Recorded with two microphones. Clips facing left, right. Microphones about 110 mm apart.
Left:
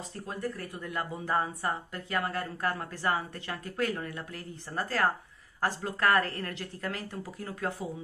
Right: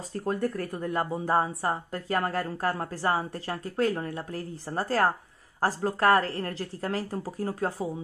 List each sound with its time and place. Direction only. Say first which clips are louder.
0.1 s speech: right 9 dB; 50° right (ahead or behind); by 7.9 s 35° right (ahead or behind)